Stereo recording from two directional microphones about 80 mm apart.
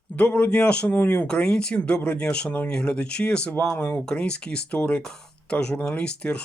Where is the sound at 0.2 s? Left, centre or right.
Centre.